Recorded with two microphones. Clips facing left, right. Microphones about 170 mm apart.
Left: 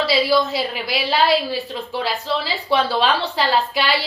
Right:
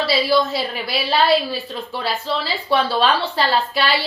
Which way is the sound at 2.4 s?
15° left (ahead or behind).